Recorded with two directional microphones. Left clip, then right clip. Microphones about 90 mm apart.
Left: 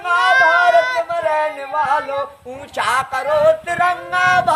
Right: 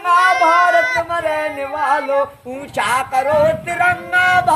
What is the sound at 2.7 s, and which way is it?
A man's voice, 20° left (ahead or behind).